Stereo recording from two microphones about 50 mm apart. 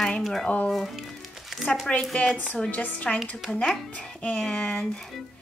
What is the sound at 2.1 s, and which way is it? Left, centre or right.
A woman's voice, left.